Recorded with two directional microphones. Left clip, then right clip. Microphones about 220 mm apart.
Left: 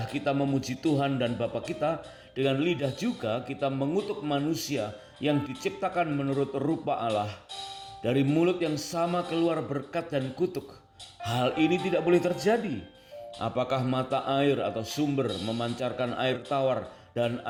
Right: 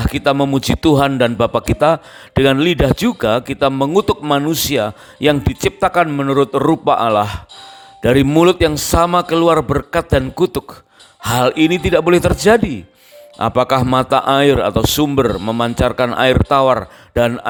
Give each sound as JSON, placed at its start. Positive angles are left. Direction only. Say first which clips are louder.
{"t": 0.0, "sound": "a man's voice", "louder": "right 14 dB", "side_deg": -55}